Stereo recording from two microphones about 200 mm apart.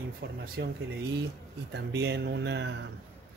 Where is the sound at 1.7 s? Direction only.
60° right (ahead or behind).